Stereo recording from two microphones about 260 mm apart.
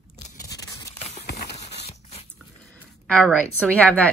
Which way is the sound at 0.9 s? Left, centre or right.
Left.